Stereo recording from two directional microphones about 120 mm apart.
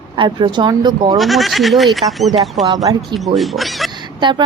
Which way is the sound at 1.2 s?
Centre (ahead or behind).